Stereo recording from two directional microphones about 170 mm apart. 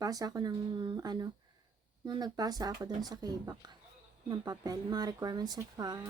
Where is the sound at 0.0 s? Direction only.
20° right (ahead or behind).